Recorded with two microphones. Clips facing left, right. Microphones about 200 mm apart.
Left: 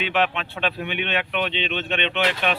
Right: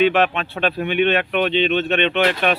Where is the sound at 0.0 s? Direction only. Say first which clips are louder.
Right 7 dB; 45° right (ahead or behind).